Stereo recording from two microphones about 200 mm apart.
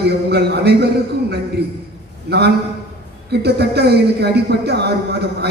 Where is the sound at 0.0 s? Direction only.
55° right (ahead or behind).